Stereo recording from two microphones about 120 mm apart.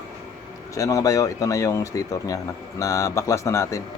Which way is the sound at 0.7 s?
30° left (ahead or behind).